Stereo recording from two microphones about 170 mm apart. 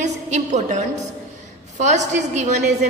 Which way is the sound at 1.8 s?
45° right (ahead or behind).